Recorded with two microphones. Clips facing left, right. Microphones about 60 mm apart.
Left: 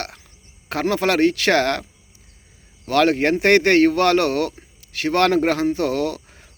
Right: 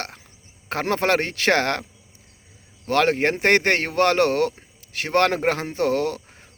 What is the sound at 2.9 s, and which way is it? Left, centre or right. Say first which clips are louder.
Speech: left 3 dB; right.